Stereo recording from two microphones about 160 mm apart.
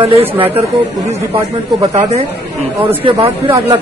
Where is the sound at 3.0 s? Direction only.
30° right (ahead or behind).